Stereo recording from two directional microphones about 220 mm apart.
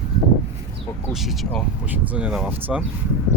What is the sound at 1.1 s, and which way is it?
Speech, centre (ahead or behind).